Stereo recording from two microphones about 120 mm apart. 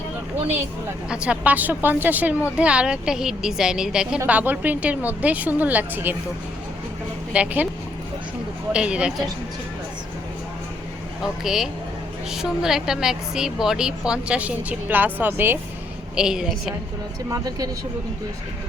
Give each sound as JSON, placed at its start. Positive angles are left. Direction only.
{"t": 1.1, "sound": "a woman's voice", "side_deg": -10}
{"t": 7.3, "sound": "a woman's voice", "side_deg": -10}
{"t": 8.7, "sound": "a woman's voice", "side_deg": -10}
{"t": 11.2, "sound": "a woman's voice", "side_deg": -5}
{"t": 16.1, "sound": "a woman's voice", "side_deg": -5}
{"t": 17.2, "sound": "speech", "side_deg": -30}